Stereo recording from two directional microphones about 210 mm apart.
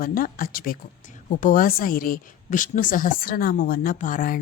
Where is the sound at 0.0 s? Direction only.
40° left (ahead or behind).